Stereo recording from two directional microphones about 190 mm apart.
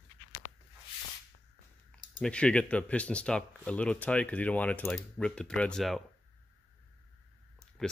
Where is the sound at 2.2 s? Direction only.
5° left (ahead or behind).